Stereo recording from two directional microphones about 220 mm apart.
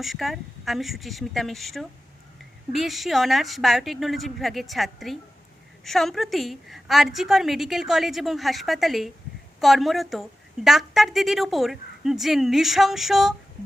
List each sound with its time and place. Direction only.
0.0 s a woman's voice: centre (ahead or behind)